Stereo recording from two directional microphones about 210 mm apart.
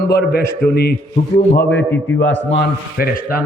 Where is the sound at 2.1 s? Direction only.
60° left (ahead or behind).